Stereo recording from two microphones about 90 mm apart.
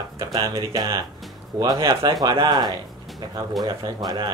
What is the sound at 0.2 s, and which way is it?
Speech, 35° right (ahead or behind).